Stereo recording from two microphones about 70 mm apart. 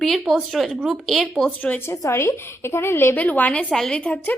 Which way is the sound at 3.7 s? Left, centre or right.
Centre.